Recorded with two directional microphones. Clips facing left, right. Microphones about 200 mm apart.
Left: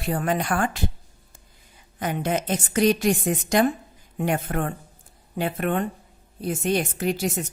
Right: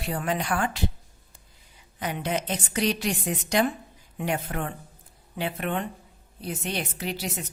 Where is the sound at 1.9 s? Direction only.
50° left (ahead or behind).